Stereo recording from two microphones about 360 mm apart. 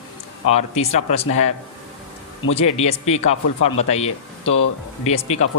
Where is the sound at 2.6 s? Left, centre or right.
Centre.